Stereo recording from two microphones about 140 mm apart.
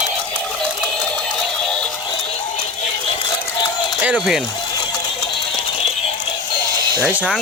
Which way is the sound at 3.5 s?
30° left (ahead or behind).